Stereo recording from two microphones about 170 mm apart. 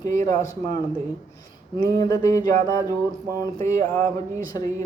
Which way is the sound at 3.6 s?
15° left (ahead or behind).